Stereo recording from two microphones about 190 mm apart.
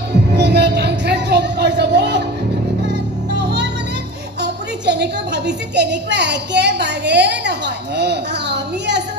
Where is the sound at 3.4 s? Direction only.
65° right (ahead or behind).